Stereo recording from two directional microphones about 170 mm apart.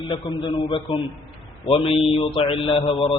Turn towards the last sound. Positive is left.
turn(degrees=35)  # may be behind; listen again after turning